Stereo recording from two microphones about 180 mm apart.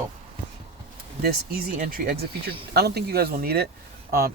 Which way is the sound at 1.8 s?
50° right (ahead or behind).